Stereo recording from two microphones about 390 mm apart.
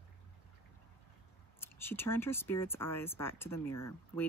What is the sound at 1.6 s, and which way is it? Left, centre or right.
Speech, centre.